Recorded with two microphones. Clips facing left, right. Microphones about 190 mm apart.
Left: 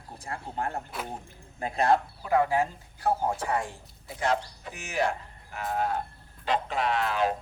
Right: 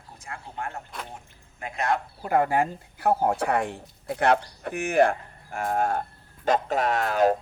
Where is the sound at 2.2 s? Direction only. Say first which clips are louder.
Right 6 dB; 55° right (ahead or behind).